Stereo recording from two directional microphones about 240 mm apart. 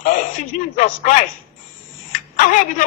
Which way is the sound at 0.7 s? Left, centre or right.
Left.